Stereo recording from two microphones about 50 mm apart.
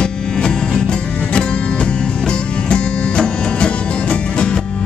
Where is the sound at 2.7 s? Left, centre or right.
Left.